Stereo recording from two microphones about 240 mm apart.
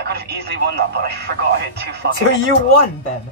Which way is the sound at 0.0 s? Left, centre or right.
Right.